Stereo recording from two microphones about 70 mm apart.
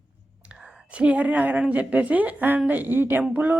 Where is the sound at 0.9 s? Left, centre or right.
Centre.